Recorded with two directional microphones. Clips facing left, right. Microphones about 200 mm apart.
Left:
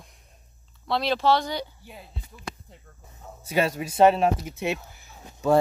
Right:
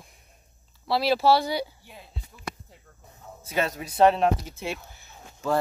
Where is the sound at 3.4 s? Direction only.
10° left (ahead or behind).